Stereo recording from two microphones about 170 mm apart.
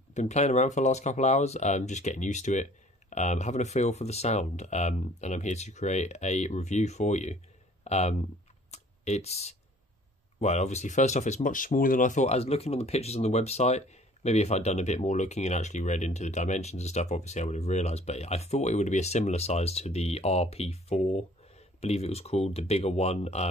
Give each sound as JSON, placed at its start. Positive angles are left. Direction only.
{"t": 0.1, "sound": "speech", "side_deg": 45}
{"t": 8.7, "sound": "a sound", "side_deg": 40}
{"t": 10.4, "sound": "speech", "side_deg": 40}